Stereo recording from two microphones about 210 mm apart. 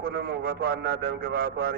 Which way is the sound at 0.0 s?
45° right (ahead or behind).